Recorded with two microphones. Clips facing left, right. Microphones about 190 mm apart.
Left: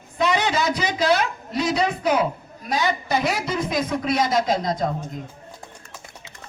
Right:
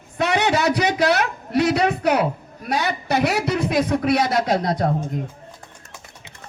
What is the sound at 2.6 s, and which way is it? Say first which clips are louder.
A man's voice: right 1 dB; 65° right (ahead or behind).